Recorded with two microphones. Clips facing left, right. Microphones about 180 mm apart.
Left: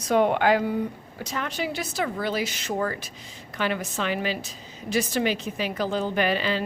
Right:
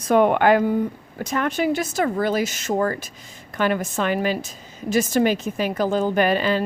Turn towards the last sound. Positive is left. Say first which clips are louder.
# right 5 dB
turn(degrees=-45)  # may be behind; listen again after turning